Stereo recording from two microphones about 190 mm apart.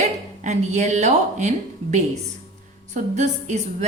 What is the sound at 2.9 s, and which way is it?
Speech, 40° right (ahead or behind).